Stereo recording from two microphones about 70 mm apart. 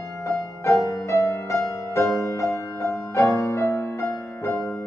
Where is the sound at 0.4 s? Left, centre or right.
Left.